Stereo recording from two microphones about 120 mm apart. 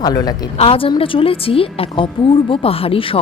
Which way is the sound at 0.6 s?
50° left (ahead or behind).